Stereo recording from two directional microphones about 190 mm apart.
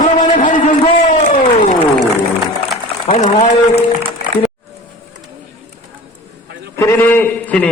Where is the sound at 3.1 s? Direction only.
40° left (ahead or behind).